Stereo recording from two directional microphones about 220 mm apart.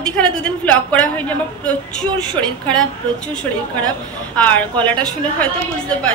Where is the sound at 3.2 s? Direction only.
5° left (ahead or behind).